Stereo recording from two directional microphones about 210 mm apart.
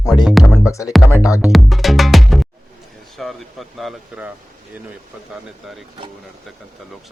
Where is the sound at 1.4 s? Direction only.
Centre (ahead or behind).